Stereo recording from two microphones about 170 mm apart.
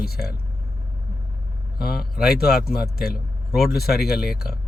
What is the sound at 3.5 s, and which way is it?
Speech, centre (ahead or behind).